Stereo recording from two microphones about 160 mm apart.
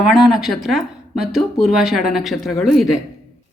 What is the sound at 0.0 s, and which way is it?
Speech, centre (ahead or behind).